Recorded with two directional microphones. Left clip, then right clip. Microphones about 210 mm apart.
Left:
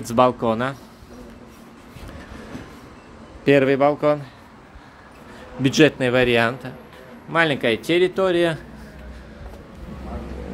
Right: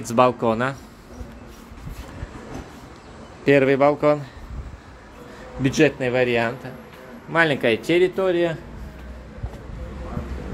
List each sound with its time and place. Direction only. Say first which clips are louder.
0.0 s speech: even; 10° left (ahead or behind)
3.4 s a man's voice: even; 10° left (ahead or behind)
5.6 s a man's voice: left 2 dB; 20° left (ahead or behind)
7.3 s speech: even; 5° left (ahead or behind)
8.2 s a man's voice: left 2 dB; 25° left (ahead or behind)